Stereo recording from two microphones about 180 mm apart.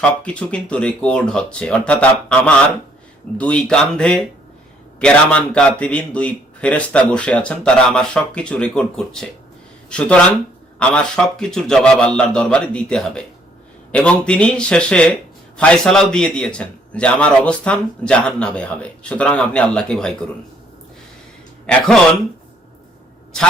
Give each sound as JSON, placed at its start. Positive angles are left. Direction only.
{"t": 0.0, "sound": "a man's voice", "side_deg": 5}
{"t": 23.3, "sound": "a man's voice", "side_deg": 5}